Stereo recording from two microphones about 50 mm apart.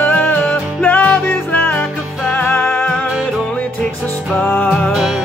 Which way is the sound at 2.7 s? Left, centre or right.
Left.